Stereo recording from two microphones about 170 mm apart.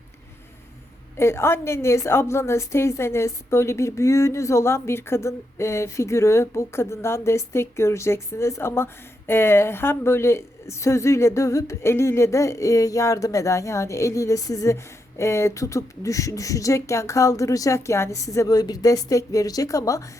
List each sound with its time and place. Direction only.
1.1 s a woman's voice: 15° left (ahead or behind)